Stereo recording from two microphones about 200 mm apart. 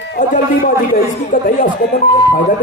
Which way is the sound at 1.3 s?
40° left (ahead or behind).